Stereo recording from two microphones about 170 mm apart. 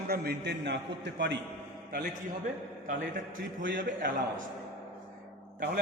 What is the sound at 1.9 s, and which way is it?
Speech, 50° right (ahead or behind).